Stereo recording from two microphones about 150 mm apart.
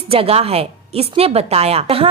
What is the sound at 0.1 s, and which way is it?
A woman's voice, 40° right (ahead or behind).